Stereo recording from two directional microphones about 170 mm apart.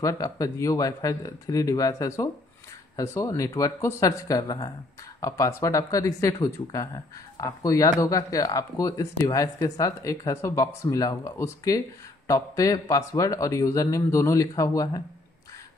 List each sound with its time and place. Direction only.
0.0 s speech: 20° left (ahead or behind)